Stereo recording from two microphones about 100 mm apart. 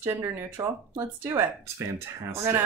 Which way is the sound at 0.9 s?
25° right (ahead or behind).